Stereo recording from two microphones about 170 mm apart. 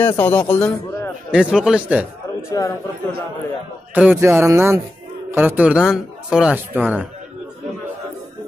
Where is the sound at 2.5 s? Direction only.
20° left (ahead or behind).